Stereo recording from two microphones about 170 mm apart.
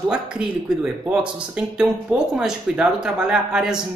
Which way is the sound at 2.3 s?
5° right (ahead or behind).